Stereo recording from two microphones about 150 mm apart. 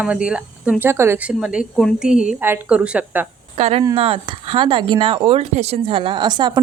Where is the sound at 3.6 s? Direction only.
40° right (ahead or behind).